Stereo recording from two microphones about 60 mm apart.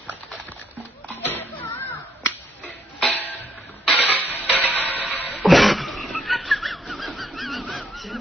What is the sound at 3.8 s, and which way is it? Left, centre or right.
Music, left.